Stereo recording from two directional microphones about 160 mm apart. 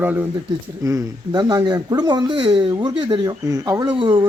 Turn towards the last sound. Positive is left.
turn(degrees=-30)  # may be behind; listen again after turning